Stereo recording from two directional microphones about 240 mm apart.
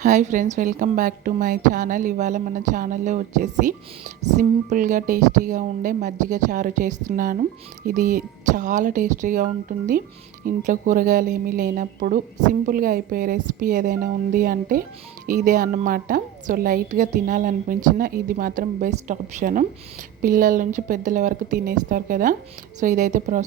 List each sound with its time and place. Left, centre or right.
0.0 s a woman's voice: right